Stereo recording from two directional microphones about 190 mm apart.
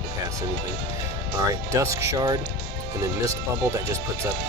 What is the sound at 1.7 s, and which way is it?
Speech, 15° right (ahead or behind).